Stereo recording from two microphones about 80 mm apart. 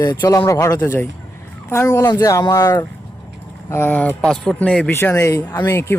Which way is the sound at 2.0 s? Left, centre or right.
Left.